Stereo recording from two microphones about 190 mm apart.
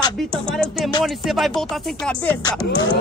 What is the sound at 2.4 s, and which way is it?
Speech, 20° left (ahead or behind).